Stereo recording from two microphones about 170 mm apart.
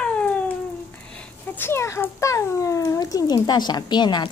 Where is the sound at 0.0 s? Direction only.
5° left (ahead or behind).